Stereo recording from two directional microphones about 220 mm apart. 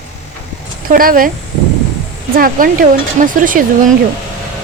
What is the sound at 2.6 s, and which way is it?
Speech, 40° right (ahead or behind).